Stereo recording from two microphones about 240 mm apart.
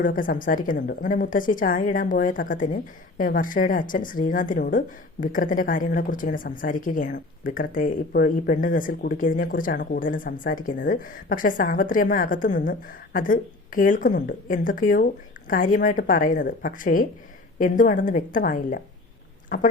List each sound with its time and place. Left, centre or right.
0.0 s a woman's voice: left